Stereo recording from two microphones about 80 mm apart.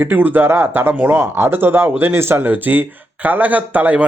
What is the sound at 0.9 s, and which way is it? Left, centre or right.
Speech, centre.